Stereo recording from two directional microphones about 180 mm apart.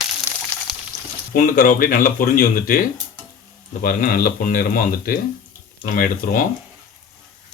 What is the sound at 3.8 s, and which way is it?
Speech, 50° left (ahead or behind).